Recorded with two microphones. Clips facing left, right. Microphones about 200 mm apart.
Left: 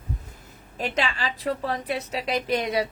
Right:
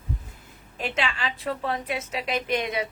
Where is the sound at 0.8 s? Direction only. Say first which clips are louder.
Left 2 dB; 40° left (ahead or behind).